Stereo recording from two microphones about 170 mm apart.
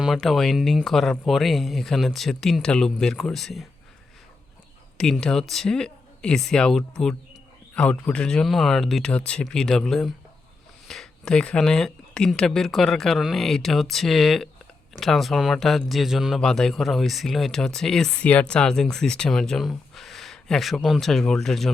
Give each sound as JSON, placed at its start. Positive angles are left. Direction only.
{"t": 0.0, "sound": "speech", "side_deg": 0}
{"t": 4.9, "sound": "speech", "side_deg": 5}